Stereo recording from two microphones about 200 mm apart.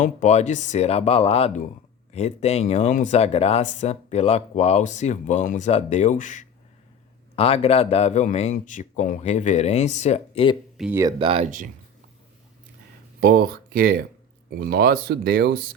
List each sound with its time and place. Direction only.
0.0 s speech: 35° left (ahead or behind)
10.8 s speech: 5° right (ahead or behind)
11.0 s speech: 25° right (ahead or behind)
13.1 s speech: 50° right (ahead or behind)